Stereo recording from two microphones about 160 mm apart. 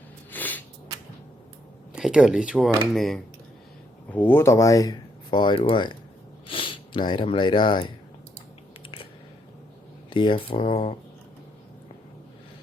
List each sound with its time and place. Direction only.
0.3 s a sound: 10° left (ahead or behind)
1.9 s speech: 5° right (ahead or behind)
4.1 s speech: 10° left (ahead or behind); by 7.9 s 30° left (ahead or behind)
10.1 s speech: 30° left (ahead or behind)